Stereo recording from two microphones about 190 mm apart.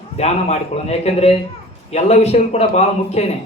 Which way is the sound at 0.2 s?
35° left (ahead or behind).